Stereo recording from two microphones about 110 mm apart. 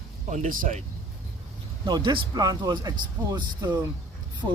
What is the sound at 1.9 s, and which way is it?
Speech, 40° right (ahead or behind).